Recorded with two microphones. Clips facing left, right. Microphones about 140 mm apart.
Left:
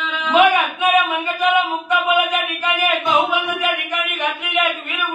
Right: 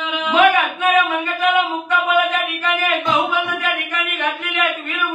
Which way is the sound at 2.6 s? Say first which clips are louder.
Even; 15° left (ahead or behind).